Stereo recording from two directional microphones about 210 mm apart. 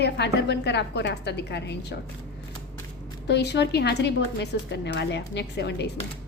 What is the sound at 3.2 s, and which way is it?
A woman's voice, 55° left (ahead or behind).